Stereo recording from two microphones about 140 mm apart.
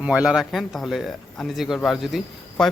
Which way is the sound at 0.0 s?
10° right (ahead or behind).